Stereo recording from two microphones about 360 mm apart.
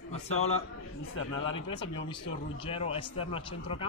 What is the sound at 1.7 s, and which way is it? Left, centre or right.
Speech, centre.